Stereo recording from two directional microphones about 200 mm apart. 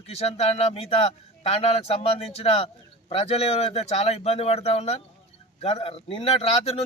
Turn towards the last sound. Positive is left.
turn(degrees=30)  # may be behind; listen again after turning